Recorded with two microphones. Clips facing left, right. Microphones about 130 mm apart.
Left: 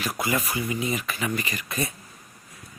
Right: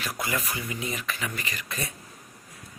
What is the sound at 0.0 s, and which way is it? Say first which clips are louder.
Speech: left 4 dB; 5° left (ahead or behind).